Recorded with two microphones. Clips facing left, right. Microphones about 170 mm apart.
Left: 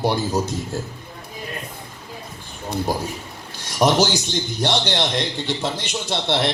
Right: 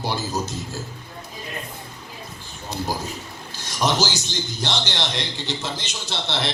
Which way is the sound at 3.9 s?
55° left (ahead or behind).